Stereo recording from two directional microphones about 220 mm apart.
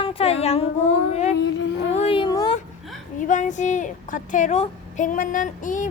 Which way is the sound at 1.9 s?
25° left (ahead or behind).